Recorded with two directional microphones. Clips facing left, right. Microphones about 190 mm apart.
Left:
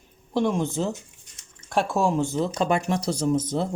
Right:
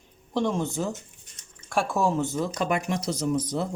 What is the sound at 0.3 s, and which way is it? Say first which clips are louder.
Speech: left 2 dB; 10° left (ahead or behind).